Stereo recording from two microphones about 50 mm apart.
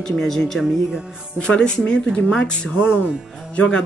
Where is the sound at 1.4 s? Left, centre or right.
Centre.